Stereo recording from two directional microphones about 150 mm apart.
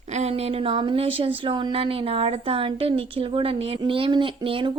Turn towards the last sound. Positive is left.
turn(degrees=-35)  # may be behind; listen again after turning